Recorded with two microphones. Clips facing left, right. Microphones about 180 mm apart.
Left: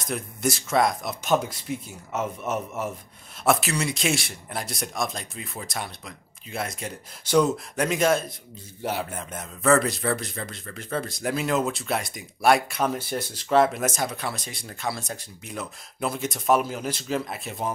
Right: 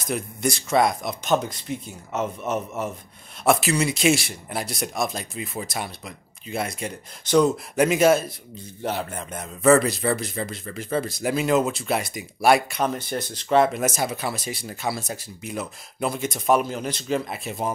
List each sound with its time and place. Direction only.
0.0 s a man's voice: centre (ahead or behind)